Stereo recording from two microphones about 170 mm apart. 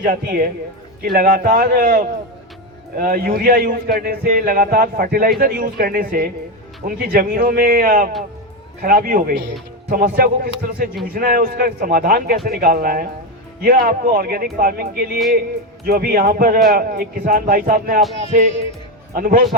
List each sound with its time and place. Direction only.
0.0 s speech: 55° right (ahead or behind)
19.1 s speech: 60° right (ahead or behind)